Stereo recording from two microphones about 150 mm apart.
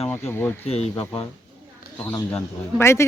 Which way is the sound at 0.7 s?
40° left (ahead or behind).